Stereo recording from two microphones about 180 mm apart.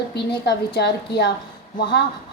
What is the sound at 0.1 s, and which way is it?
A woman's voice, 65° left (ahead or behind).